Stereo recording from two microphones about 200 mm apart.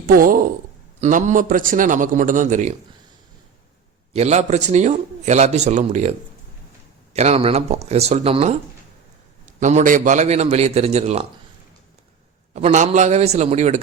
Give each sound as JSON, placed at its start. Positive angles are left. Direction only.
{"t": 0.1, "sound": "a man's voice", "side_deg": -45}
{"t": 4.1, "sound": "a man's voice", "side_deg": -35}
{"t": 12.5, "sound": "a man's voice", "side_deg": -35}